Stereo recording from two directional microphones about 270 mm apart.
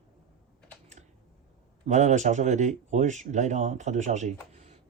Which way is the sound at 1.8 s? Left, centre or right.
Right.